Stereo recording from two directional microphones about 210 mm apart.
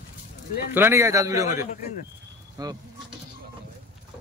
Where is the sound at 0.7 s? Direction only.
10° right (ahead or behind).